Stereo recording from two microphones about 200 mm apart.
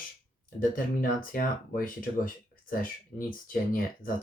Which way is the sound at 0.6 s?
45° left (ahead or behind).